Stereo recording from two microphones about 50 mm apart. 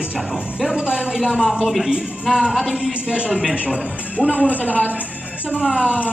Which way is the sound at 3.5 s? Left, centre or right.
Right.